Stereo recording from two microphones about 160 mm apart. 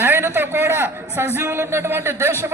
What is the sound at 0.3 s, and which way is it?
A man's voice, 15° right (ahead or behind).